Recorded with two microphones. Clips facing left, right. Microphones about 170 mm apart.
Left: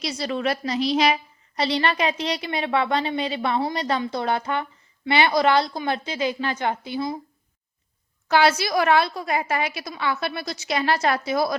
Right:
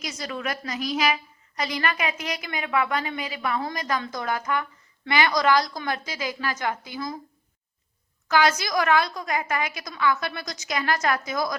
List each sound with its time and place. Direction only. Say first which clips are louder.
0.0 s a woman's voice: left 6 dB; 30° left (ahead or behind)
8.3 s a woman's voice: left 3 dB; 30° left (ahead or behind)